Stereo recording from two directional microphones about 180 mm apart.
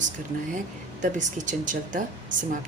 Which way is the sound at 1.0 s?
45° right (ahead or behind).